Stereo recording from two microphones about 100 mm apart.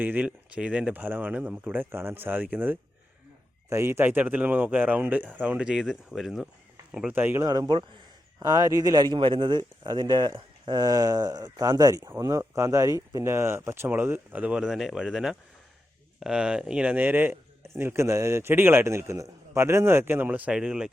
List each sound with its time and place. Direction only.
0.0 s speech: 15° right (ahead or behind)
3.7 s speech: 30° right (ahead or behind); by 6.5 s 5° right (ahead or behind)
7.1 s speech: 20° right (ahead or behind)
7.4 s a man's voice: 35° right (ahead or behind)
9.1 s speech: 60° right (ahead or behind); by 20.9 s 5° right (ahead or behind)